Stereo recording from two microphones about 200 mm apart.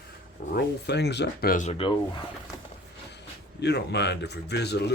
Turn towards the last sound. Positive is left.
turn(degrees=55)  # may be behind; listen again after turning